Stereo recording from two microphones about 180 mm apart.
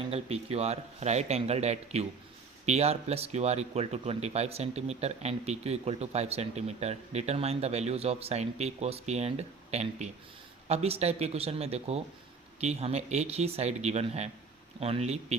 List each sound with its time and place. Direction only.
0.1 s speech: 35° right (ahead or behind)